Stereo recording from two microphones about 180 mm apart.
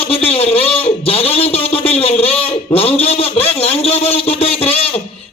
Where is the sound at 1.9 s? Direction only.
35° left (ahead or behind).